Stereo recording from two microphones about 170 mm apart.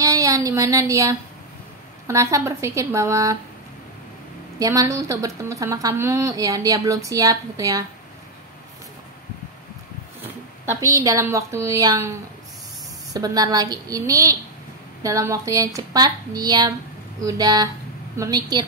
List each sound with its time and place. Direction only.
0.0 s a woman's voice: 20° right (ahead or behind)
4.6 s a woman's voice: 20° right (ahead or behind)
10.2 s a woman's voice: 15° right (ahead or behind)